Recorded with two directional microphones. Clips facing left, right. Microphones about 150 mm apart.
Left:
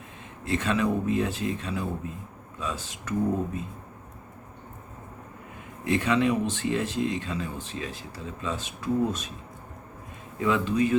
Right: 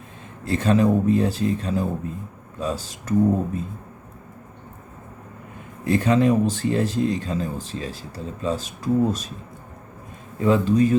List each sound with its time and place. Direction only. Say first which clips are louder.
0.4 s speech: right 7 dB; 35° right (ahead or behind)
5.8 s speech: right 5 dB; 40° right (ahead or behind)
10.4 s speech: right 6 dB; 40° right (ahead or behind)